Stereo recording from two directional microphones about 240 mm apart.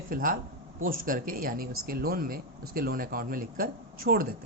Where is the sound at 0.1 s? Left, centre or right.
Right.